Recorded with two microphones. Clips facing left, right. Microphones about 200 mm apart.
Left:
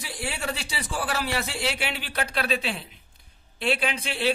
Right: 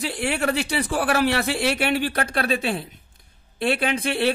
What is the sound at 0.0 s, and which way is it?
Speech, 65° right (ahead or behind).